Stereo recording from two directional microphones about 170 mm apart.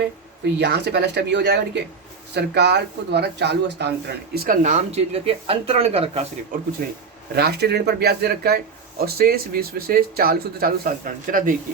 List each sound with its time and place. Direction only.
0.6 s speech: 85° right
2.3 s speech: 80° right
4.4 s speech: 55° right (ahead or behind); by 6.2 s 35° right (ahead or behind)
6.8 s speech: 65° right (ahead or behind)